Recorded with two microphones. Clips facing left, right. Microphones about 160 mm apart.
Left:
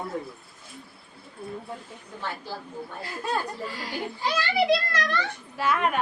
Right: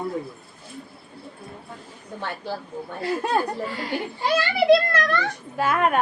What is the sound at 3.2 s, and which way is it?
A child's voice, 60° right (ahead or behind).